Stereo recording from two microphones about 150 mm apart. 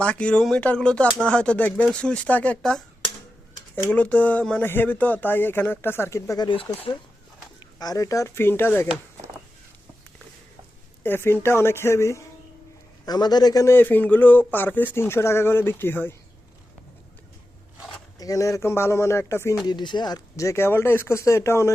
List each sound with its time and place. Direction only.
0.0 s a man's voice: 5° left (ahead or behind)
3.8 s a man's voice: 10° left (ahead or behind); by 6.9 s 35° left (ahead or behind)
7.8 s speech: 25° left (ahead or behind)
11.0 s a man's voice: 15° left (ahead or behind)
18.2 s speech: 20° left (ahead or behind)
19.6 s speech: 30° left (ahead or behind)